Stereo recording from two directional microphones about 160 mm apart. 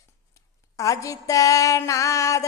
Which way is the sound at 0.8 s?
20° left (ahead or behind).